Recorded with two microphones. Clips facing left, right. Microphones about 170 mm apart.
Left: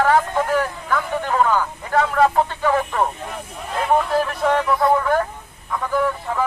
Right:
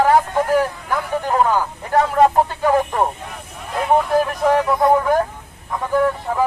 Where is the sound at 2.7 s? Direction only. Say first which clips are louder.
Right 3 dB; 15° right (ahead or behind).